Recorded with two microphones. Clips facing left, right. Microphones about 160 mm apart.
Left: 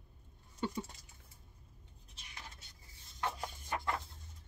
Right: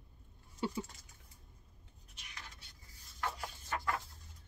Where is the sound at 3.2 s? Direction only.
20° left (ahead or behind).